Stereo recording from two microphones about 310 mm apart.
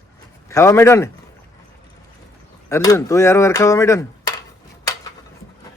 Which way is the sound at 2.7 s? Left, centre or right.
Centre.